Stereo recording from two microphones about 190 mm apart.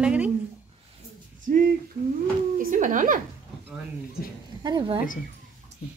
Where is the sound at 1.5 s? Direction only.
45° right (ahead or behind).